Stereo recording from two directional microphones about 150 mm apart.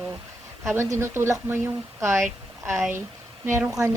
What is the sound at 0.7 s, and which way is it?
A woman's voice, 15° right (ahead or behind).